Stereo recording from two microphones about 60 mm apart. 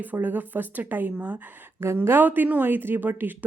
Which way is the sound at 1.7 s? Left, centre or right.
Right.